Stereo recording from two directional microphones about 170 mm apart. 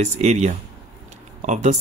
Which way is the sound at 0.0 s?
40° right (ahead or behind).